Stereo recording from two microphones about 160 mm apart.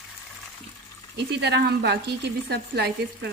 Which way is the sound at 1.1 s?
90° right.